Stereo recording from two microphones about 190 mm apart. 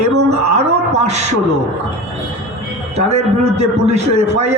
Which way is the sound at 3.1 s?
35° right (ahead or behind).